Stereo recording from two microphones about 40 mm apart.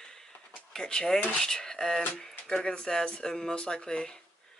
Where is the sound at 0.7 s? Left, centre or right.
Centre.